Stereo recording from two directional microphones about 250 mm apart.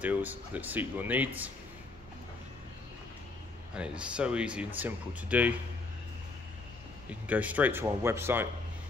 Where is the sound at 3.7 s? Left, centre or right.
Centre.